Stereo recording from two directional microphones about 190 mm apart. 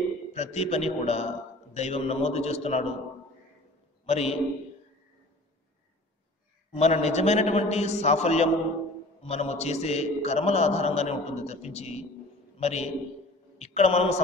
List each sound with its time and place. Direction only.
0.3 s a man's voice: 35° left (ahead or behind)
4.0 s a man's voice: 35° left (ahead or behind)
6.7 s a man's voice: 35° left (ahead or behind)